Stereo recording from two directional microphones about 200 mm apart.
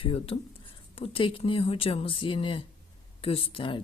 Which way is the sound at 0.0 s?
30° left (ahead or behind).